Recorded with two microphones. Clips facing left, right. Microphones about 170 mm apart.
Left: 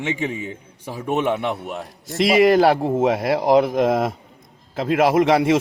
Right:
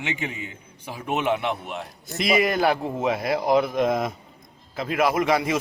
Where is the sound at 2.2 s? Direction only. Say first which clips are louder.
Left 7 dB; 85° left.